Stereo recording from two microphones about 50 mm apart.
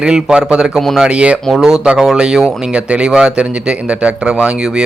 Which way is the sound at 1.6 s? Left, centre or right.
Centre.